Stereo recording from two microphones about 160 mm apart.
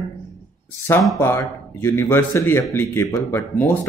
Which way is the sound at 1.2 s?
15° left (ahead or behind).